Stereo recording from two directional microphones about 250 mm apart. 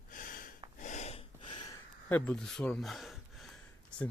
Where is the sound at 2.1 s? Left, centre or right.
Centre.